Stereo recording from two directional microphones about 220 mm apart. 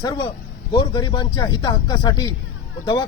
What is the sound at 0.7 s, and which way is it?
Speech, 20° left (ahead or behind).